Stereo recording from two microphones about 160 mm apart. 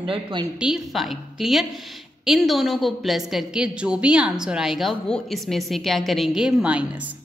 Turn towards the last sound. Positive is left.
turn(degrees=-10)  # may be behind; listen again after turning